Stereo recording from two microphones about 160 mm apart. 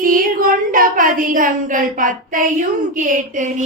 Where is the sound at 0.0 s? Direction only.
60° right (ahead or behind).